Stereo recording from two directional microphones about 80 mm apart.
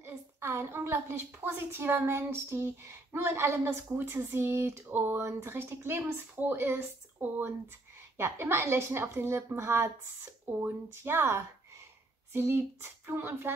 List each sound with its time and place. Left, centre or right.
0.0 s a woman's voice: right